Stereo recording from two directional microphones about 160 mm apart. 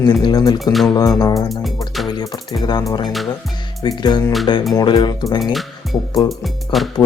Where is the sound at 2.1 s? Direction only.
25° left (ahead or behind).